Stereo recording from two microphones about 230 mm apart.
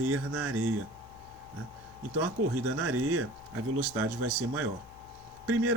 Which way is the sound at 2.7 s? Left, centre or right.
Right.